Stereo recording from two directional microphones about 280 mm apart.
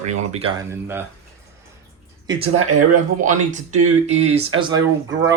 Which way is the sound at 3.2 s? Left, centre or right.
Right.